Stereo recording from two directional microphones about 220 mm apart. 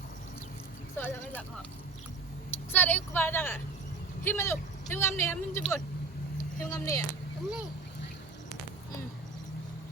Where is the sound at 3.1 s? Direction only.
10° left (ahead or behind).